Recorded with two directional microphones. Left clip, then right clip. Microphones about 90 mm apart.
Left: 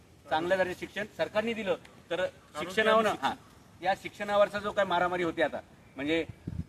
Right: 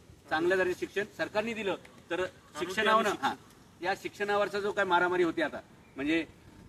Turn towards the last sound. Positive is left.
turn(degrees=25)  # may be behind; listen again after turning